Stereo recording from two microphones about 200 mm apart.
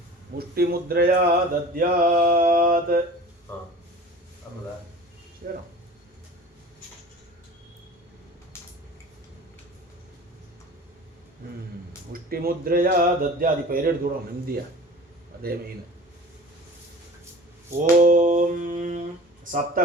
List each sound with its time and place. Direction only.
0.3 s speech: 50° right (ahead or behind)
5.4 s speech: 45° right (ahead or behind)
8.5 s a sound: 10° left (ahead or behind)
12.1 s speech: 50° right (ahead or behind)
17.7 s mantra: 40° right (ahead or behind)